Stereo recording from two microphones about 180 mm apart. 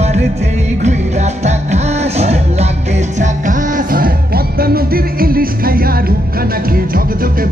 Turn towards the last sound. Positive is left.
turn(degrees=-55)  # may be behind; listen again after turning